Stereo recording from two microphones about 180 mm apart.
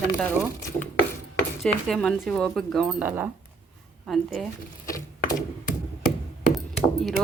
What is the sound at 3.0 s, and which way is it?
Speech, 10° right (ahead or behind).